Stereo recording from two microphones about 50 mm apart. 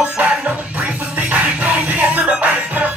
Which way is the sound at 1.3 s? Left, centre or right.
Right.